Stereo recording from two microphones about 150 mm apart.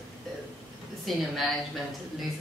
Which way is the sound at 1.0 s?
Centre (ahead or behind).